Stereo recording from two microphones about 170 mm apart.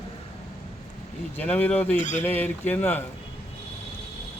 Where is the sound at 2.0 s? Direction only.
45° left (ahead or behind).